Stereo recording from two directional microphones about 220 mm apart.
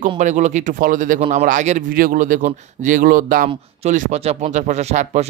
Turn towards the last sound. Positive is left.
turn(degrees=-30)  # may be behind; listen again after turning